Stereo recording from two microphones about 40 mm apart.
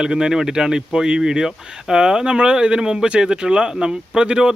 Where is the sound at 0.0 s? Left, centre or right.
Centre.